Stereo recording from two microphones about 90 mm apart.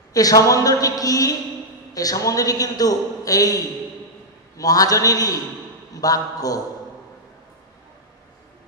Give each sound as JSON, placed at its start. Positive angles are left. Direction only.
{"t": 0.1, "sound": "a man's voice", "side_deg": 40}